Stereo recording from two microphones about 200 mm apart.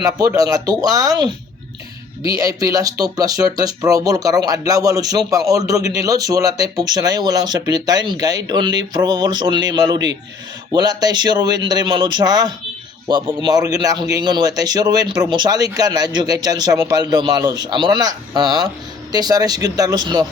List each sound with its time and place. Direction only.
0.0 s speech: 20° right (ahead or behind)